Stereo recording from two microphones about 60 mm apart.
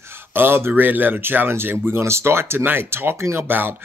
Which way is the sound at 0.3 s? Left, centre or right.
Right.